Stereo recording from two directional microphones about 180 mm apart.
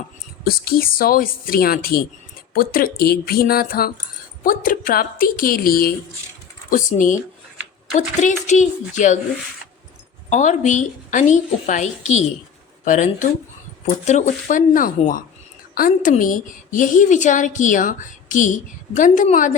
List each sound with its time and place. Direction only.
0.4 s a woman's voice: 55° left (ahead or behind)
10.2 s a woman's voice: 40° left (ahead or behind)